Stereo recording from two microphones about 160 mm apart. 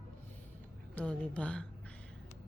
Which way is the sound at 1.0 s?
10° left (ahead or behind).